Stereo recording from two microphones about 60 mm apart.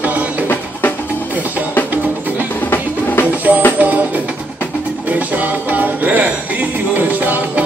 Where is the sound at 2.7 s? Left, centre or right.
Left.